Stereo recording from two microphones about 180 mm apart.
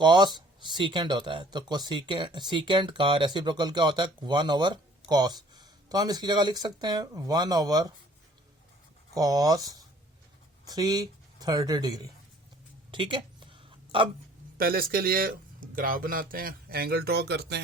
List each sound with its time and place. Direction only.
0.0 s speech: 25° right (ahead or behind)
9.1 s speech: 20° right (ahead or behind)
12.9 s a sound: 25° right (ahead or behind)
14.6 s speech: 55° right (ahead or behind)